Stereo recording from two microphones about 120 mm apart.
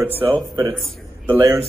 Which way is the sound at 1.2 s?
20° right (ahead or behind).